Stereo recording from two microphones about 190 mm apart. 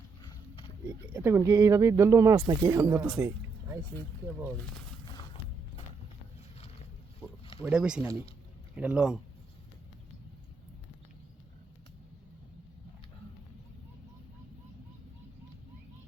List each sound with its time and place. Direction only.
0.2 s horse: 25° left (ahead or behind)
0.9 s speech: 5° right (ahead or behind)
3.2 s a sound: 15° right (ahead or behind)
5.1 s music: 25° left (ahead or behind)
7.6 s speech: 5° right (ahead or behind)